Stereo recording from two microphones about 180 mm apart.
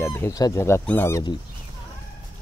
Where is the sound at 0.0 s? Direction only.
15° left (ahead or behind).